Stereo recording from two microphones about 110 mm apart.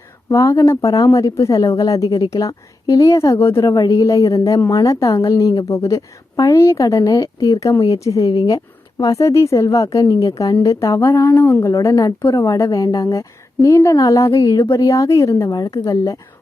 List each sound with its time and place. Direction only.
0.3 s a woman's voice: 25° left (ahead or behind)